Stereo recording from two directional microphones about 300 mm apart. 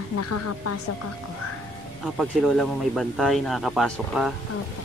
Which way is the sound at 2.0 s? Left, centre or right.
Centre.